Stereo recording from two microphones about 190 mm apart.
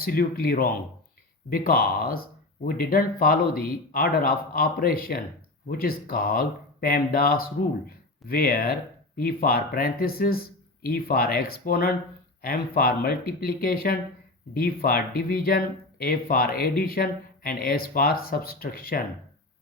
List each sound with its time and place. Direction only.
0.0 s speech: 50° left (ahead or behind)